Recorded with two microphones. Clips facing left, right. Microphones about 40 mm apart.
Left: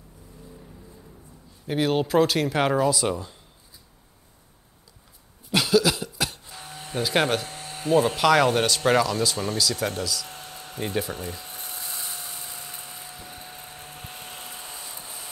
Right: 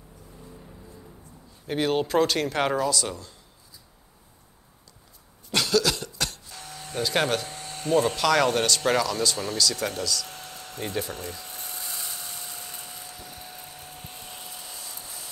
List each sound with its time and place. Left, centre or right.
1.7 s speech: centre; by 3.3 s left
5.5 s cough: centre
6.5 s a sound: centre
13.7 s hair dryer: left